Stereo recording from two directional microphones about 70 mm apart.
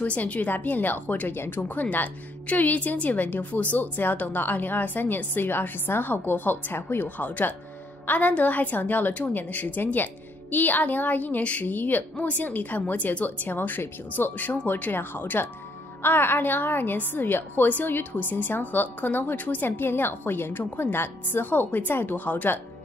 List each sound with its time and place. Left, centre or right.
0.0 s a woman's voice: centre